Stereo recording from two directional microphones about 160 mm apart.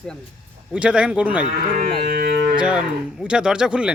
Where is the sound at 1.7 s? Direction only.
60° right (ahead or behind).